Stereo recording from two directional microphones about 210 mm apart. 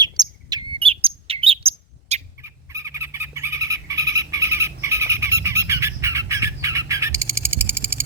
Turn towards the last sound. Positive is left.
turn(degrees=-10)  # may be behind; listen again after turning